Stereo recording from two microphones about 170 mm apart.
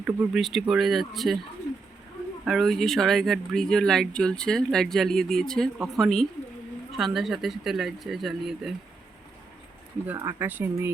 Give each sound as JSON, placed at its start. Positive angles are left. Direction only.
{"t": 0.0, "sound": "speech", "side_deg": 0}
{"t": 2.4, "sound": "speech", "side_deg": 0}
{"t": 10.1, "sound": "speech", "side_deg": -15}